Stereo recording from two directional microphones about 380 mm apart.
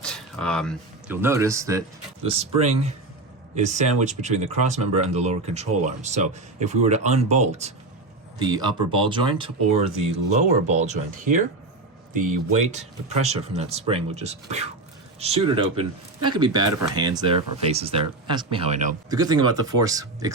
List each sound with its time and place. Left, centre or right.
0.0 s speech: centre